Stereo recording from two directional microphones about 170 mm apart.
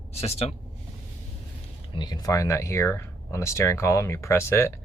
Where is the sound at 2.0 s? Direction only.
25° left (ahead or behind).